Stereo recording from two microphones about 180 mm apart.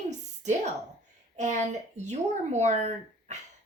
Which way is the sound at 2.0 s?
40° right (ahead or behind).